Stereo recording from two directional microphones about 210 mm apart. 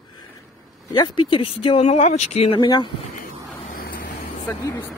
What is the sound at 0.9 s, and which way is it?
Speech, 20° left (ahead or behind).